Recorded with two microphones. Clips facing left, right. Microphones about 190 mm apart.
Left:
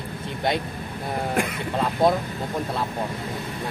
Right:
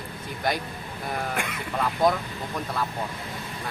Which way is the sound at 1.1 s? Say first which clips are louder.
Left 6 dB; 30° left (ahead or behind).